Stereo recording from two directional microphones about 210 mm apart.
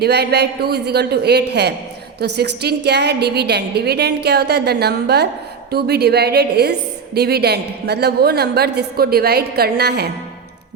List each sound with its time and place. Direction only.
0.0 s a woman's voice: 50° right (ahead or behind)